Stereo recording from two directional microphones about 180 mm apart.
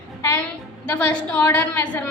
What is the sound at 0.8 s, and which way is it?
A woman's voice, 5° left (ahead or behind).